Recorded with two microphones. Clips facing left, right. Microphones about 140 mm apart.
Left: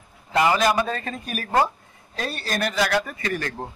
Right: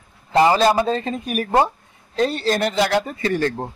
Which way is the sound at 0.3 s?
30° right (ahead or behind).